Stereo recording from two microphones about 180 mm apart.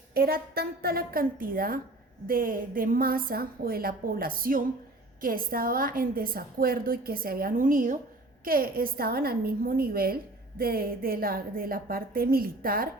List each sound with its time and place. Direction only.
0.1 s a woman's voice: 55° right (ahead or behind)